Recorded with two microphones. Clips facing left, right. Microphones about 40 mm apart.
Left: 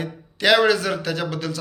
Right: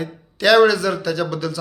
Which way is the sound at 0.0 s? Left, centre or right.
Left.